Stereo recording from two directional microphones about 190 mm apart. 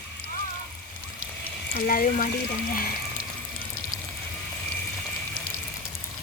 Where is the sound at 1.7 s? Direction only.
45° left (ahead or behind).